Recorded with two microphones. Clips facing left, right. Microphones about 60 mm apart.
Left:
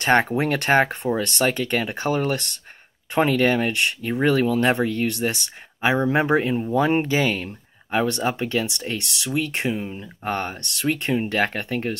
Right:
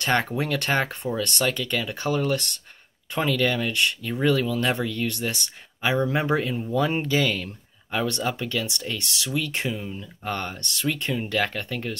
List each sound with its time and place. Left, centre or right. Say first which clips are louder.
0.0 s speech: left 5 dB; left
5.0 s speech: left 4 dB; left